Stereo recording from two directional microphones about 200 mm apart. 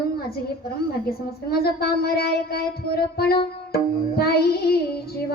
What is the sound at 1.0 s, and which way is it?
Speech, 50° left (ahead or behind).